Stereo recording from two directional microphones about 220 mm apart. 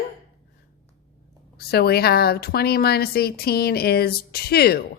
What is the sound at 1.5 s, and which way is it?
A woman's voice, 45° left (ahead or behind).